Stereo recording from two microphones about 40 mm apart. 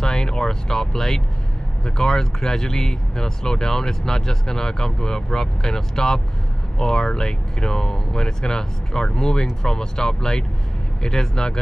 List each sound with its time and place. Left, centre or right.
0.0 s speech: centre